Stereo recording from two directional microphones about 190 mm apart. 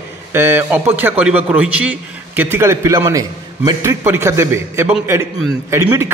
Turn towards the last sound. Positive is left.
turn(degrees=-15)  # may be behind; listen again after turning